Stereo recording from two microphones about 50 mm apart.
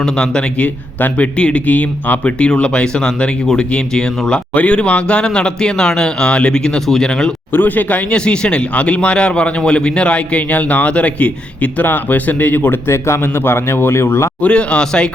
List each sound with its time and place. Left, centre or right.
0.0 s speech: centre
0.6 s a man's voice: left; by 4.4 s centre
4.5 s speech: left
7.5 s speech: left
8.1 s a man's voice: centre; by 12.8 s left
12.9 s speech: left
14.4 s a man's voice: left